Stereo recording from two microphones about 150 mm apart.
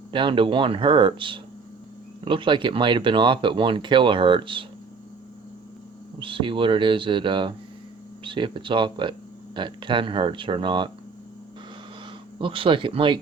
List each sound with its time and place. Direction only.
0.1 s speech: 35° right (ahead or behind)
6.1 s speech: 35° right (ahead or behind)
12.4 s speech: 35° right (ahead or behind)